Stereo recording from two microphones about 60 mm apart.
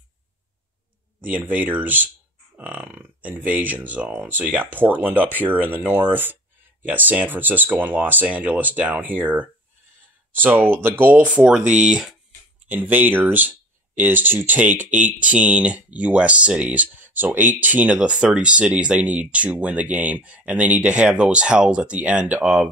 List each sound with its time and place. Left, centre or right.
1.2 s speech: right
2.5 s a sound: right
3.0 s speech: right; by 12.1 s centre
12.6 s speech: right
17.9 s speech: centre